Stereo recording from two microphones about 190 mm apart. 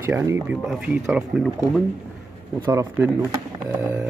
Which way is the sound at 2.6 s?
15° right (ahead or behind).